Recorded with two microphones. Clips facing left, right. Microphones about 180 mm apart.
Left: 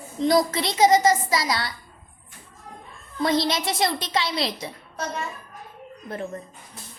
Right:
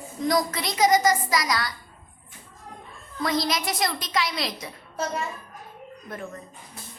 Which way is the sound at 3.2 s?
25° left (ahead or behind).